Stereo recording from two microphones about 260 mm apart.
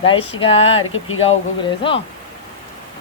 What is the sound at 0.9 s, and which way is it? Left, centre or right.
Speech, left.